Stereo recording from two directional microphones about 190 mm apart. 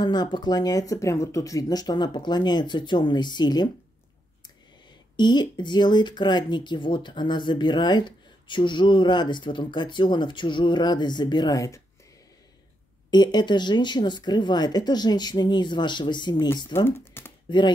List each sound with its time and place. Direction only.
0.0 s speech: 20° left (ahead or behind)
5.1 s speech: 25° left (ahead or behind)
13.1 s speech: 20° left (ahead or behind)
17.5 s speech: 25° left (ahead or behind)